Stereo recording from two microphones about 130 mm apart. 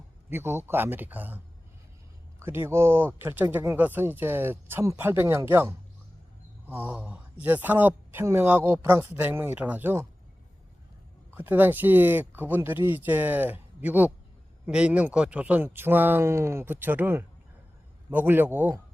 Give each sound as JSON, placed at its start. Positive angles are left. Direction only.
{"t": 0.3, "sound": "speech", "side_deg": -20}
{"t": 2.4, "sound": "speech", "side_deg": -20}
{"t": 11.3, "sound": "speech", "side_deg": -15}